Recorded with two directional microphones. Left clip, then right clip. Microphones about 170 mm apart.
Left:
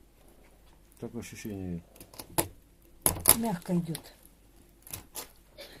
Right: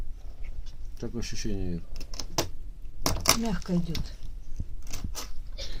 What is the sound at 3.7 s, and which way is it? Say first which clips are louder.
Speech: right 1 dB; 50° left (ahead or behind).